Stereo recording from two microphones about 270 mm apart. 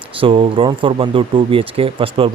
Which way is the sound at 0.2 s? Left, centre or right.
Centre.